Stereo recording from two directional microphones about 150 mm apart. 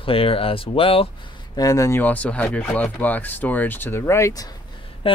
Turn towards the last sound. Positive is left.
turn(degrees=40)  # may be behind; listen again after turning